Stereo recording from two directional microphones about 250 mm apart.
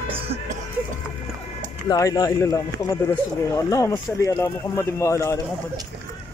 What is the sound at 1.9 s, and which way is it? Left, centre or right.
Speech, centre.